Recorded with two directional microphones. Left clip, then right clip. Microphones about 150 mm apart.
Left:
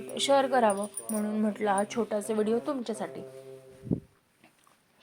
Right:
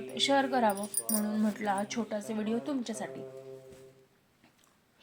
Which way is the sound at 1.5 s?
15° left (ahead or behind).